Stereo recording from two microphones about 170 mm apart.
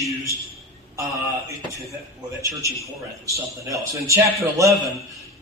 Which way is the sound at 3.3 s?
20° right (ahead or behind).